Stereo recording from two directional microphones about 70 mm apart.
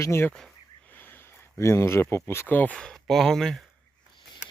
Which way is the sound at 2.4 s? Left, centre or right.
Left.